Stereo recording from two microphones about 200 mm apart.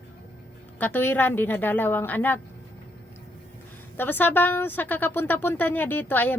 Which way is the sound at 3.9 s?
10° left (ahead or behind).